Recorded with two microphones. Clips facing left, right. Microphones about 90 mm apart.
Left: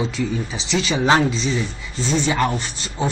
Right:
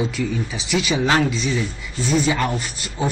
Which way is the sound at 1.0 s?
25° left (ahead or behind).